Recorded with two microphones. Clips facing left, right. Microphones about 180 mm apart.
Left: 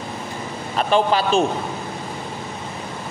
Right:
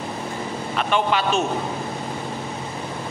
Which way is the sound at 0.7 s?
35° left (ahead or behind).